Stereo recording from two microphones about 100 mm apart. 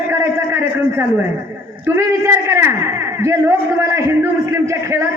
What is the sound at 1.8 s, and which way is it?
A man's voice, 25° right (ahead or behind).